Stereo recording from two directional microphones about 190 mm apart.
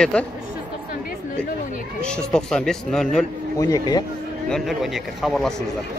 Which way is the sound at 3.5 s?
20° left (ahead or behind).